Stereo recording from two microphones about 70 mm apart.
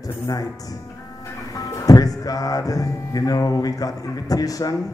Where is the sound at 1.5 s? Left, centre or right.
Left.